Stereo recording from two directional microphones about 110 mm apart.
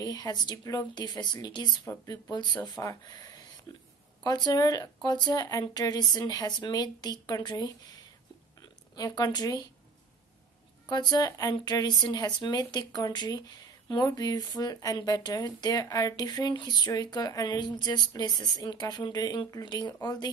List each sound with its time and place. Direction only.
0.0 s speech: 35° left (ahead or behind)
8.9 s speech: 35° left (ahead or behind)
10.9 s speech: 40° left (ahead or behind)